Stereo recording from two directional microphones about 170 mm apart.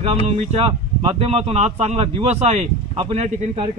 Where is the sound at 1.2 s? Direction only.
35° right (ahead or behind).